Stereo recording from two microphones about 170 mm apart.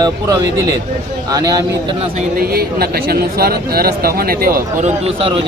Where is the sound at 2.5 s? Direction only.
65° right (ahead or behind).